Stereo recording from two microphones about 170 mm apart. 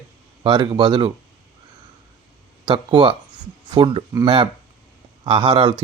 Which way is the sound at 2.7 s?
25° right (ahead or behind).